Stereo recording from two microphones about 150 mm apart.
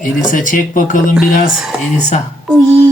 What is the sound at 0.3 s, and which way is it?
Speech, 60° left (ahead or behind).